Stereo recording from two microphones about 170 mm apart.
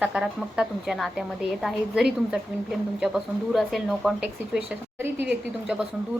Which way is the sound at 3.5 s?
Centre (ahead or behind).